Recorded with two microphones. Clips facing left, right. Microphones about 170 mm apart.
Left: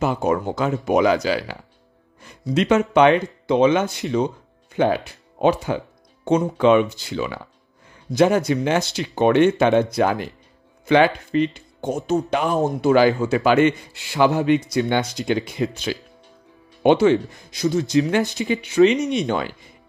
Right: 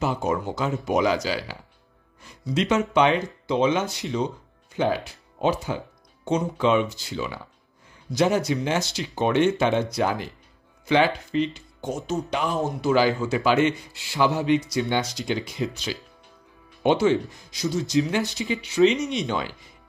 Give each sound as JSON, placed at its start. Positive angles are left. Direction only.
{"t": 0.0, "sound": "speech", "side_deg": 55}